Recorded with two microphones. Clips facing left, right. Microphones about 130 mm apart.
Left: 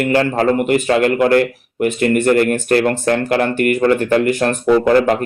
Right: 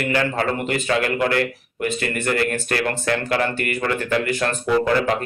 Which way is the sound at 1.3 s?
55° left (ahead or behind).